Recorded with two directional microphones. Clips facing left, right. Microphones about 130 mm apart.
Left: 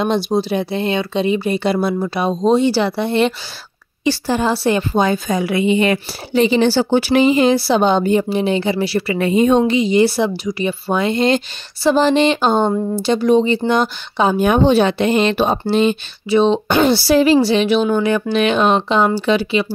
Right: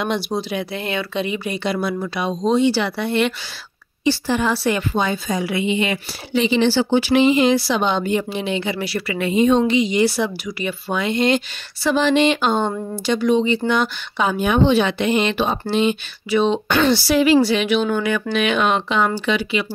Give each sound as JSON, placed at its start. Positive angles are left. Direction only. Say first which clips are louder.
{"t": 0.0, "sound": "speech", "louder": "left 5 dB", "side_deg": 30}
{"t": 4.9, "sound": "a woman's voice", "louder": "left 5 dB", "side_deg": 45}
{"t": 9.2, "sound": "a woman's voice", "louder": "left 2 dB", "side_deg": 45}
{"t": 9.8, "sound": "speech", "louder": "left 4 dB", "side_deg": 30}